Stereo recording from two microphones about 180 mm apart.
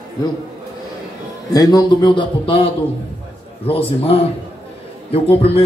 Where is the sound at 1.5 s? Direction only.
20° left (ahead or behind).